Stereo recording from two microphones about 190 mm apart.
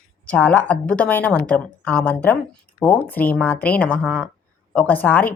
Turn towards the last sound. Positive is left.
turn(degrees=10)  # may be behind; listen again after turning